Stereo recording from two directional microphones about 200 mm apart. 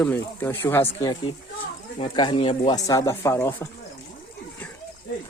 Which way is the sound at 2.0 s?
25° left (ahead or behind).